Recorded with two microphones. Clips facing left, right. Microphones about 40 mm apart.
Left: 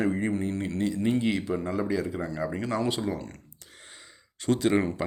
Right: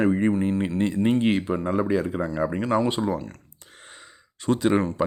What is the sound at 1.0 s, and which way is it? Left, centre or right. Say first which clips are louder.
Speech: right 5 dB; right.